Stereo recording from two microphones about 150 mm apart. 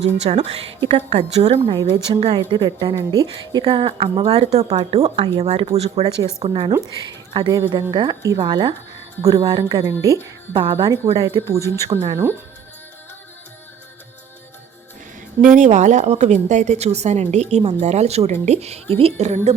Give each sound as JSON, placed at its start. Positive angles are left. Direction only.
{"t": 0.0, "sound": "a woman's voice", "side_deg": -45}
{"t": 6.7, "sound": "a woman's voice", "side_deg": -30}
{"t": 10.5, "sound": "a woman's voice", "side_deg": -35}
{"t": 11.4, "sound": "speech", "side_deg": -20}
{"t": 15.4, "sound": "a woman's voice", "side_deg": -60}